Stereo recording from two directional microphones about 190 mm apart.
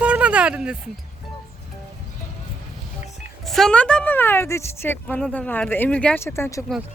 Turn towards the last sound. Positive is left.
turn(degrees=15)  # may be behind; listen again after turning